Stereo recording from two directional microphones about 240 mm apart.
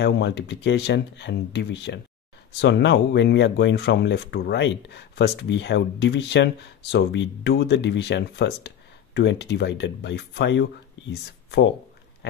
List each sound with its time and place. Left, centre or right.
0.0 s speech: left